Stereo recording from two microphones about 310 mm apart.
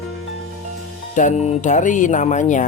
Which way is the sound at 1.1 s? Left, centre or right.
Left.